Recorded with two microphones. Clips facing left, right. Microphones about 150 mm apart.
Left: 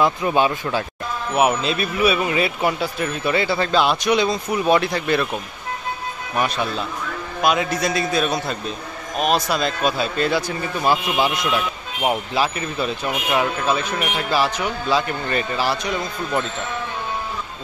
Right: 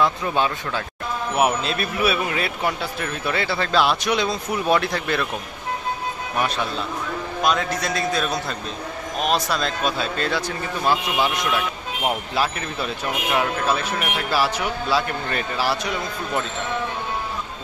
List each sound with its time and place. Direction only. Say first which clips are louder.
0.0 s speech: left 3 dB; 10° left (ahead or behind)
6.3 s speech: left 3 dB; 5° left (ahead or behind)
12.4 s speech: left 2 dB; centre (ahead or behind)